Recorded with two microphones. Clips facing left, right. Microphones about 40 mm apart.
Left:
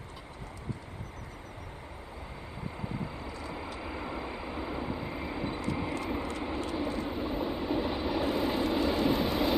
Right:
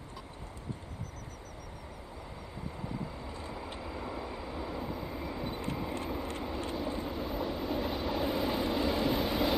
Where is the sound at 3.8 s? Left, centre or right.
Left.